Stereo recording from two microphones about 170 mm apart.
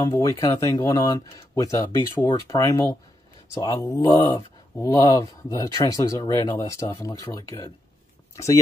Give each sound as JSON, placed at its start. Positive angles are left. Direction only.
{"t": 0.1, "sound": "speech", "side_deg": 20}
{"t": 4.2, "sound": "speech", "side_deg": 30}
{"t": 4.7, "sound": "speech", "side_deg": 20}